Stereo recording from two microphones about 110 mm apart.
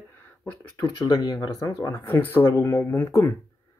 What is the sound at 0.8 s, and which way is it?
Speech, 40° left (ahead or behind).